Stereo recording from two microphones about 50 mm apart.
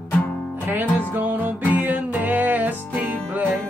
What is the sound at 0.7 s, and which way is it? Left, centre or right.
Music, right.